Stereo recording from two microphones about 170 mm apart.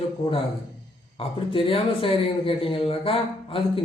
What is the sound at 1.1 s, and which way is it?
Speech, 35° left (ahead or behind).